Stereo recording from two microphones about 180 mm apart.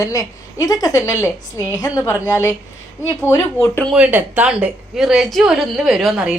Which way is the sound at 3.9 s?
5° right (ahead or behind).